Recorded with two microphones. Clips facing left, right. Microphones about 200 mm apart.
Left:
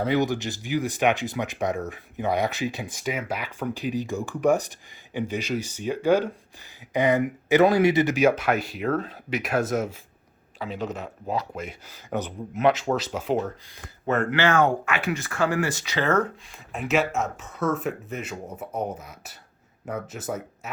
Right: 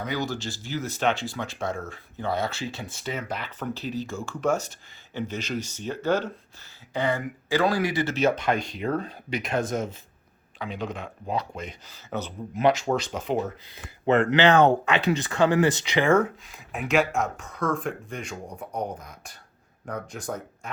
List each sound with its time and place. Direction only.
0.0 s speech: 25° left (ahead or behind); by 13.4 s 5° left (ahead or behind)
14.1 s speech: 15° right (ahead or behind)
16.7 s speech: centre (ahead or behind)